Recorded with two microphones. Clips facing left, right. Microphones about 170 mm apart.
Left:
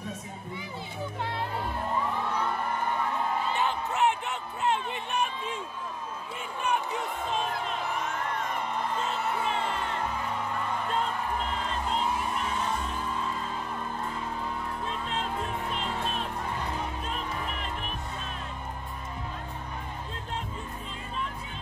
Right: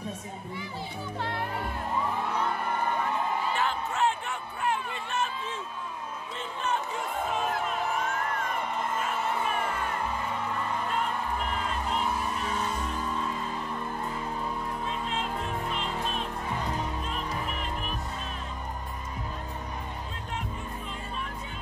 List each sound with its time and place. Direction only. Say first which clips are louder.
3.5 s music: left 1 dB; 20° left (ahead or behind)
9.0 s music: even; 25° left (ahead or behind)